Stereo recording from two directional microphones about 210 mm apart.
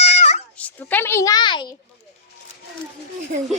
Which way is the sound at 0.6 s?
10° left (ahead or behind).